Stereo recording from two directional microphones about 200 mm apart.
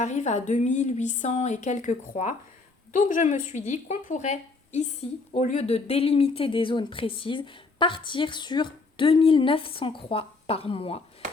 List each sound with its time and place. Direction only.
0.0 s speech: 35° left (ahead or behind)